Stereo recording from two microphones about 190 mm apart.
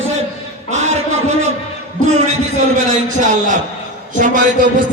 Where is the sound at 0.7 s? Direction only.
35° right (ahead or behind).